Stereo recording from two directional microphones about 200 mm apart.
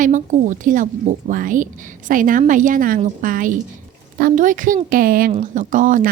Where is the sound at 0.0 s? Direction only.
40° right (ahead or behind).